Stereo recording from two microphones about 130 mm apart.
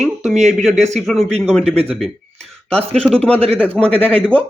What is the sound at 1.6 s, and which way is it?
Speech, 50° right (ahead or behind).